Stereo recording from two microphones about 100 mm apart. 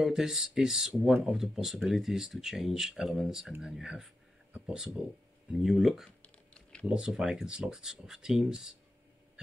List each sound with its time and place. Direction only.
0.0 s speech: 5° right (ahead or behind)
4.5 s a sound: 15° right (ahead or behind)
4.7 s speech: 5° right (ahead or behind)
6.2 s typing: 10° left (ahead or behind)
6.9 s speech: 5° right (ahead or behind)